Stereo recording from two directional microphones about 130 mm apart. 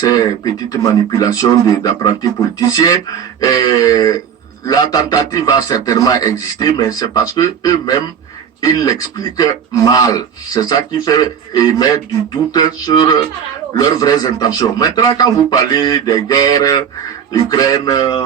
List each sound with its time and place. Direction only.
0.0 s speech: 30° left (ahead or behind)
12.5 s a sound: 30° left (ahead or behind)
13.7 s speech: 30° left (ahead or behind)